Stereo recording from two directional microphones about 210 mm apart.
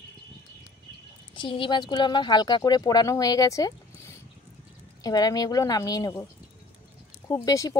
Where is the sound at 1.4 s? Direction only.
25° left (ahead or behind).